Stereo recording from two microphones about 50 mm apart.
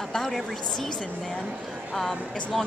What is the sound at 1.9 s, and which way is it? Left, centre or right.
Speech, centre.